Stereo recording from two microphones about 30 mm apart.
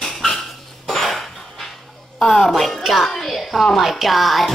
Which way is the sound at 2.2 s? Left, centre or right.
Centre.